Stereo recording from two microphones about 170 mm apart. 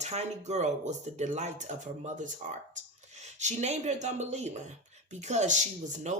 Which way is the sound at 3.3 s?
45° right (ahead or behind).